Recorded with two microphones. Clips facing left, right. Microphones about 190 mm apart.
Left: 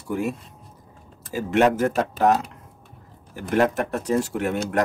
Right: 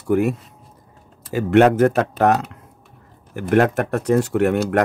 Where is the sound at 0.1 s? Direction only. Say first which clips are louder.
Right 8 dB; 60° right (ahead or behind).